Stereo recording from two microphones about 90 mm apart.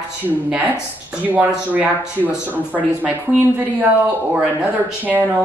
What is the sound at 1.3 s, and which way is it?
Speech, 20° right (ahead or behind).